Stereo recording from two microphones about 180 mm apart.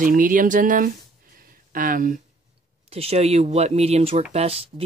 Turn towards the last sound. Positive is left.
turn(degrees=-35)  # may be behind; listen again after turning